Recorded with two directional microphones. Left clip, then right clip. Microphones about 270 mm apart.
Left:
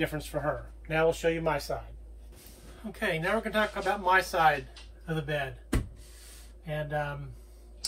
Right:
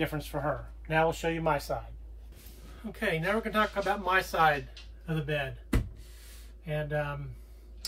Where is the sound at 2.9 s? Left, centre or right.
Centre.